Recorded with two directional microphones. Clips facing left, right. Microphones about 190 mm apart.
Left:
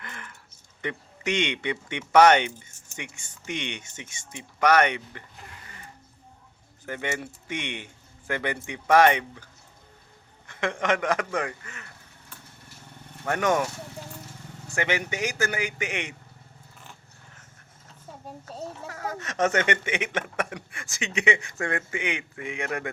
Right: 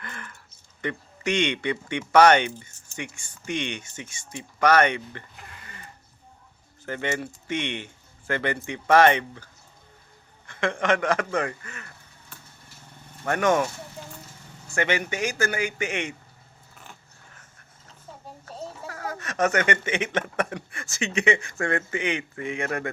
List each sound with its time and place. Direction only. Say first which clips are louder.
0.0 s a sound: right 2 dB; 20° left (ahead or behind)
0.8 s speech: right 2 dB; 20° left (ahead or behind)
6.8 s speech: right 3 dB; 10° left (ahead or behind)
10.4 s speech: right 2 dB; 20° left (ahead or behind)
13.2 s speech: right 2 dB; 15° left (ahead or behind)
14.7 s speech: right 2 dB; 15° left (ahead or behind)
18.9 s speech: even; 20° left (ahead or behind)